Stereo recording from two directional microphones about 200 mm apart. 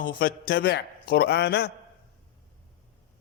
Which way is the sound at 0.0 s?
45° left (ahead or behind).